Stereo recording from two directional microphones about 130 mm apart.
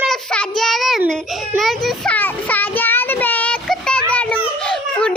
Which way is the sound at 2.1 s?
15° left (ahead or behind).